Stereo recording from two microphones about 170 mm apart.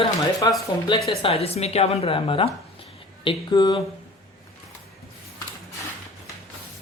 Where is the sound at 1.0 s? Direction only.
35° left (ahead or behind).